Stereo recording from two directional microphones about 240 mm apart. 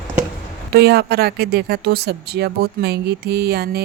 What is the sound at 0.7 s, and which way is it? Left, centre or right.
Speech, right.